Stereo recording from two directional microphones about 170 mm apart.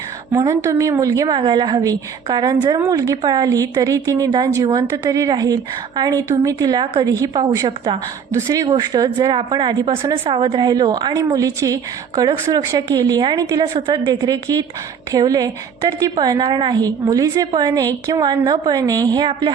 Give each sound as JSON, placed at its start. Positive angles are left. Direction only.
{"t": 0.3, "sound": "a woman's voice", "side_deg": -15}